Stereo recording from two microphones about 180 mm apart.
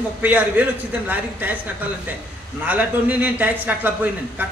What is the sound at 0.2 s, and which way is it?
A man's voice, 10° right (ahead or behind).